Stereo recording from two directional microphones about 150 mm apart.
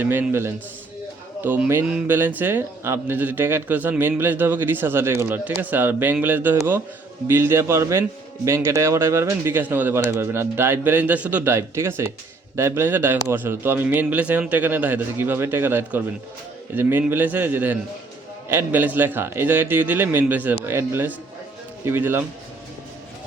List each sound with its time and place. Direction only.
0.0 s speech: 15° right (ahead or behind)